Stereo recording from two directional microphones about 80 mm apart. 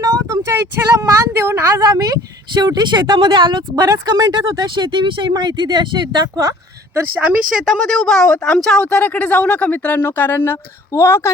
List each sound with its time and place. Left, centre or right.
0.0 s speech: right
2.6 s speech: right
3.8 s speech: right
5.3 s speech: right
7.5 s speech: centre; by 11.3 s left